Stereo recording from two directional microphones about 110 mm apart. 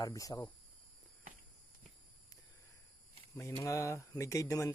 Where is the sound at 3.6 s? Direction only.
25° left (ahead or behind).